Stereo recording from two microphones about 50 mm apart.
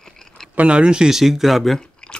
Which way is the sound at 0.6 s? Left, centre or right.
Right.